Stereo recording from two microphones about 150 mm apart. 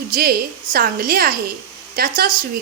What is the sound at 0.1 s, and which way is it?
A woman's voice, 85° right.